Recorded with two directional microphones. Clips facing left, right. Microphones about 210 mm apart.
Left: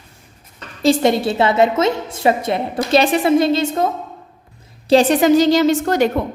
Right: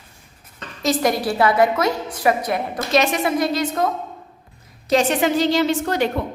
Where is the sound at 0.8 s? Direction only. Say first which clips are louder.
Left 5 dB; 25° left (ahead or behind).